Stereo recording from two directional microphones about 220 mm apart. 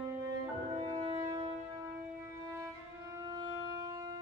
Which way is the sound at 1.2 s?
20° right (ahead or behind).